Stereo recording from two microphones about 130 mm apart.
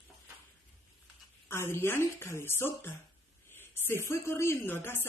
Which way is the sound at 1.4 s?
20° left (ahead or behind).